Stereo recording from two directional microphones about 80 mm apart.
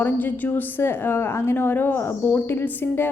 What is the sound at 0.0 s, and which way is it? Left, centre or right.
A woman's voice, left.